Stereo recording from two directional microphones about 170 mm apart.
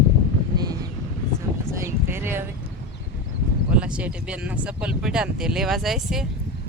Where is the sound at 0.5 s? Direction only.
20° right (ahead or behind).